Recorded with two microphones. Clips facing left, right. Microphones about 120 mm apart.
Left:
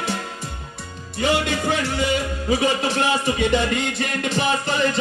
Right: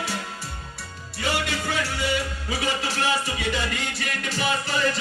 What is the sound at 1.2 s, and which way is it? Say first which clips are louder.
Music: left 6 dB; 20° left (ahead or behind).